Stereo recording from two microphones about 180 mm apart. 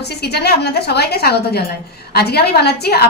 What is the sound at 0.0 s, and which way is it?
A woman's voice, 65° left (ahead or behind).